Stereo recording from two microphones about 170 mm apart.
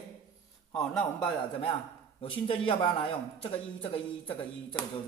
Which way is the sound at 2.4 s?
30° left (ahead or behind).